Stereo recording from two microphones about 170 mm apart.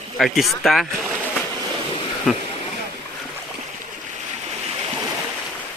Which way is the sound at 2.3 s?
Centre (ahead or behind).